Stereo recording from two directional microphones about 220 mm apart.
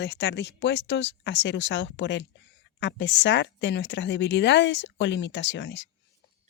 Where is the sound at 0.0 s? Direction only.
50° left (ahead or behind).